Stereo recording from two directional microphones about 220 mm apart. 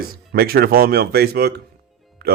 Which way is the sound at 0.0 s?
45° right (ahead or behind).